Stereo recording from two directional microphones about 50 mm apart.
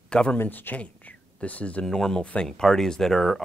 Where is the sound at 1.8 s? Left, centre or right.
Centre.